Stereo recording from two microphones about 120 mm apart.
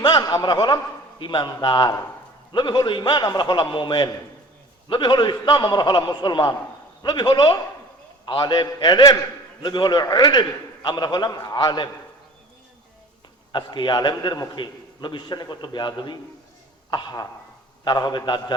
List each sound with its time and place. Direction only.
0.0 s a man's voice: 35° left (ahead or behind)
13.5 s a man's voice: 40° left (ahead or behind)